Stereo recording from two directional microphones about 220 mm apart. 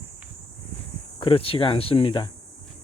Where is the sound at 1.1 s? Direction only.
25° left (ahead or behind).